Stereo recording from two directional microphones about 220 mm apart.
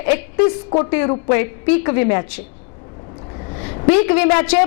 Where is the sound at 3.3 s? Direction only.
20° left (ahead or behind).